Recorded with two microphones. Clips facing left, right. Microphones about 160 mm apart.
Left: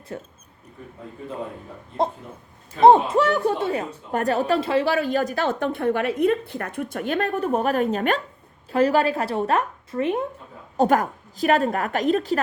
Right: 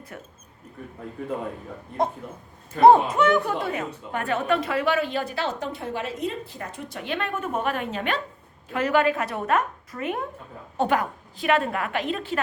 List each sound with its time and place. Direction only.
0.1 s speech: 30° left (ahead or behind)
2.8 s a woman's voice: 20° left (ahead or behind)
10.8 s a woman's voice: 45° left (ahead or behind)